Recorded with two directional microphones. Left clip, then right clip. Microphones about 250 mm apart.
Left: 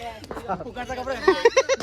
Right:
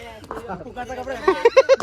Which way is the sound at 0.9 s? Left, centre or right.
Centre.